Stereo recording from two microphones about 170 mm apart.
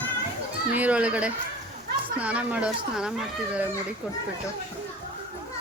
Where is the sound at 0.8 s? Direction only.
10° right (ahead or behind).